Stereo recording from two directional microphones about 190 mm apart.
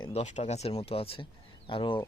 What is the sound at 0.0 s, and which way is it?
Speech, 35° left (ahead or behind).